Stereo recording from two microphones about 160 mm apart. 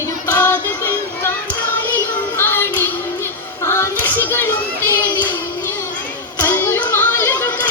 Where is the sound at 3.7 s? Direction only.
15° left (ahead or behind).